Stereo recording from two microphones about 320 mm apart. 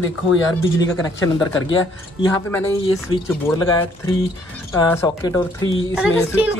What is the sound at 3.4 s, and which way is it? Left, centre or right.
A man's voice, centre.